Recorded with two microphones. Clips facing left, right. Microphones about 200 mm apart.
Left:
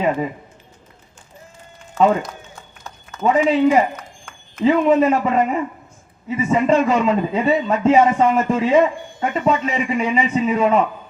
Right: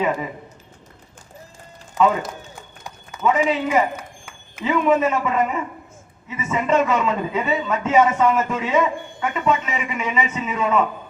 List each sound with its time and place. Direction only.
2.0 s speech: 15° right (ahead or behind)
3.2 s a man's voice: 35° left (ahead or behind)
3.9 s a sound: 10° right (ahead or behind)
4.6 s a man's voice: 35° left (ahead or behind)